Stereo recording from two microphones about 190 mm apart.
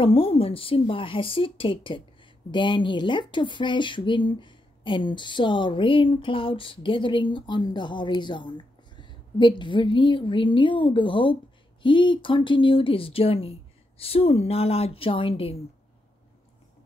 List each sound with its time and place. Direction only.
0.0 s speech: 30° left (ahead or behind)